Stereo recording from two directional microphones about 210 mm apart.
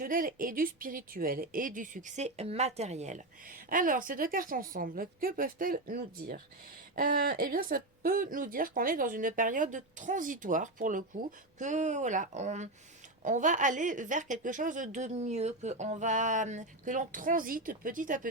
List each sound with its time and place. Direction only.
0.0 s a woman's voice: 40° right (ahead or behind)